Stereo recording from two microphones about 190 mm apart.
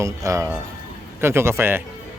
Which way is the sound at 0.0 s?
15° right (ahead or behind).